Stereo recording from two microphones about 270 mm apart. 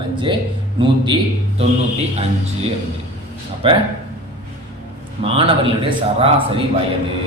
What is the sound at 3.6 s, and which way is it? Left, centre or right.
Speech, centre.